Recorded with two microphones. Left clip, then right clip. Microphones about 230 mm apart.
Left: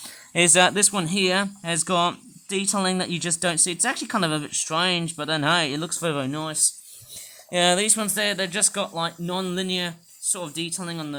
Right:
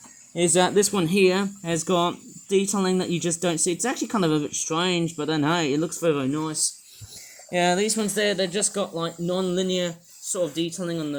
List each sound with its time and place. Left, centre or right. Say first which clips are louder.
0.3 s speech: left 2 dB; left